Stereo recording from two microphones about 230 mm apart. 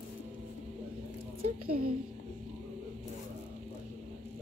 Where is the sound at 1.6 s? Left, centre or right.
Right.